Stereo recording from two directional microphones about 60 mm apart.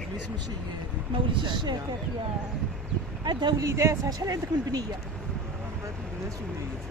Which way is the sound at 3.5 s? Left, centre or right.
Right.